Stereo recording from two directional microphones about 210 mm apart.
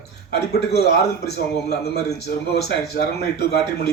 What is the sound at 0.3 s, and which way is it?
A man's voice, 50° left (ahead or behind).